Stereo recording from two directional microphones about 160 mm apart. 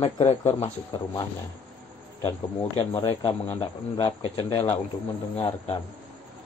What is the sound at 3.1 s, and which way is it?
A man's voice, 30° left (ahead or behind).